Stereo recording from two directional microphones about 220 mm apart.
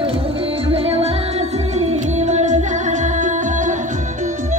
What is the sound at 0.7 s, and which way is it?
Music, 25° right (ahead or behind).